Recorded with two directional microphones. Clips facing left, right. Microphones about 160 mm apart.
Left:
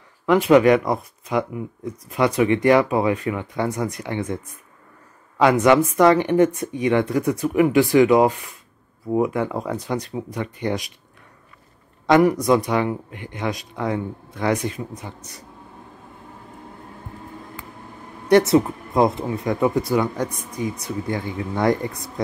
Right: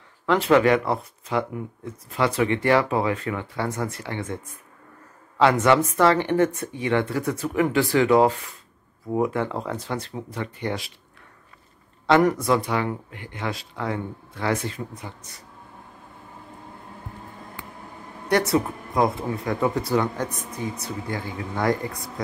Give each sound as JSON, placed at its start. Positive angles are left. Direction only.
{"t": 0.3, "sound": "speech", "side_deg": 15}
{"t": 5.4, "sound": "speech", "side_deg": 15}
{"t": 12.2, "sound": "speech", "side_deg": 15}
{"t": 18.3, "sound": "speech", "side_deg": 25}